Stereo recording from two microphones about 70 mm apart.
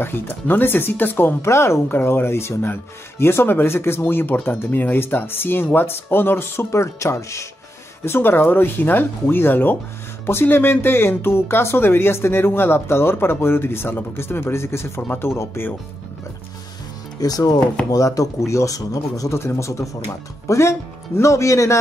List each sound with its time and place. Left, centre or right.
0.0 s speech: left
1.4 s speech: left
1.9 s speech: left
8.0 s speech: left
15.0 s speech: left
17.2 s speech: left
17.9 s speech: left
19.3 s speech: left